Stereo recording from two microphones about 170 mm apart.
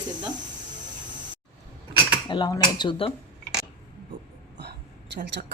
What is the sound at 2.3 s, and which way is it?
Speech, 25° left (ahead or behind).